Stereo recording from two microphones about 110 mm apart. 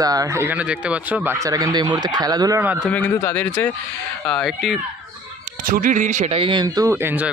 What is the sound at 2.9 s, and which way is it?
Speech, 15° left (ahead or behind).